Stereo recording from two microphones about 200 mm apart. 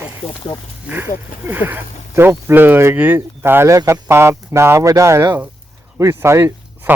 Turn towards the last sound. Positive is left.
turn(degrees=-10)  # may be behind; listen again after turning